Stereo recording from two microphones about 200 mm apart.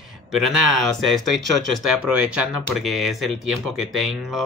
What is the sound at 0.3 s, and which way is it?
Speech, centre (ahead or behind).